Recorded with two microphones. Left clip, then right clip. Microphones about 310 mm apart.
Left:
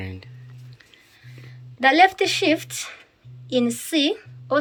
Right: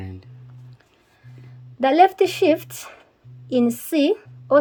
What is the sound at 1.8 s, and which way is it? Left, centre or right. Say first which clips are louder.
A woman's voice: right 1 dB; right.